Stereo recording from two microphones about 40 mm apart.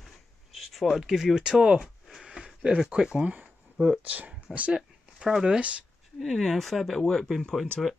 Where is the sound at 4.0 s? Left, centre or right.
Right.